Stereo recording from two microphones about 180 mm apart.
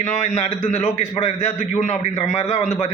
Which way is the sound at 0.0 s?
40° left (ahead or behind).